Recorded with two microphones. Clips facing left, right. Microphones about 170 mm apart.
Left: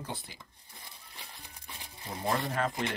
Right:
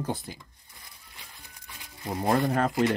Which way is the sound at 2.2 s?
50° right (ahead or behind).